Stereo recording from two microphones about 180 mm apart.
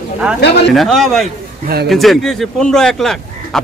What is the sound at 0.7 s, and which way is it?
A man's voice, centre (ahead or behind).